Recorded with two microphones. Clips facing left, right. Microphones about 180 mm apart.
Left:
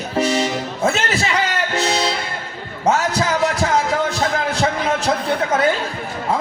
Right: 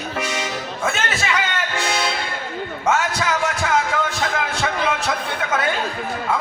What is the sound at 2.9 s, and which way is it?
Music, 35° left (ahead or behind).